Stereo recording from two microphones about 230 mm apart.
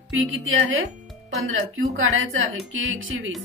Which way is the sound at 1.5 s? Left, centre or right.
Right.